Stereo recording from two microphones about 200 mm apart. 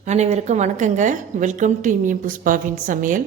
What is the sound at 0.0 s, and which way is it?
A woman's voice, 35° right (ahead or behind).